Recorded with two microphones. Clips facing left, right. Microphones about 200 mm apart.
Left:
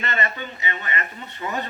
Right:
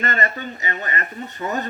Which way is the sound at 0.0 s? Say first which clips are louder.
Right 3 dB; 45° right (ahead or behind).